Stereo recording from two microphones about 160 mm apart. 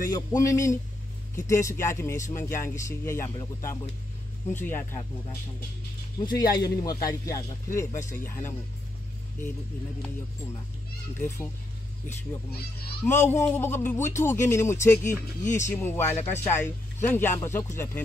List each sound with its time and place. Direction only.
0.1 s speech: 20° left (ahead or behind)
6.1 s speech: 25° left (ahead or behind)
11.1 s speech: 20° left (ahead or behind)
13.0 s speech: 15° left (ahead or behind)